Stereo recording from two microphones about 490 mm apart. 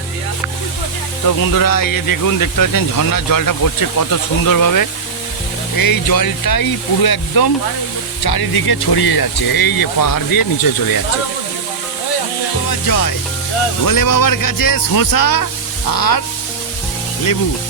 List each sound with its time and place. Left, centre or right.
1.4 s speech: left
12.9 s speech: left